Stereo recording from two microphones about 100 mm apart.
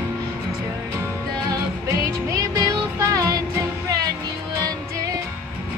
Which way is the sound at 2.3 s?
40° right (ahead or behind).